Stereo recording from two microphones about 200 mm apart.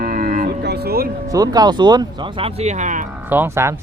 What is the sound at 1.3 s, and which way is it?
Speech, 20° right (ahead or behind).